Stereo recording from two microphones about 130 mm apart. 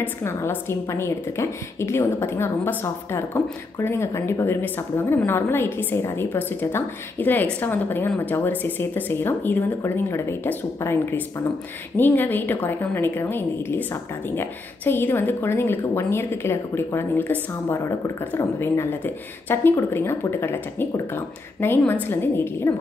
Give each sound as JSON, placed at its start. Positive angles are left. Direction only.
{"t": 0.0, "sound": "a woman's voice", "side_deg": 20}